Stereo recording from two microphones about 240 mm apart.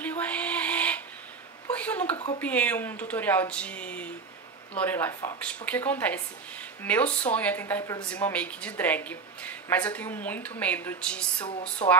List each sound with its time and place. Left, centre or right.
0.0 s a sound: centre
2.3 s a woman's voice: centre
11.4 s speech: left